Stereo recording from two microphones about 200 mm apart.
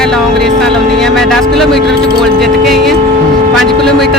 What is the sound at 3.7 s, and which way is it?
Speech, 50° right (ahead or behind).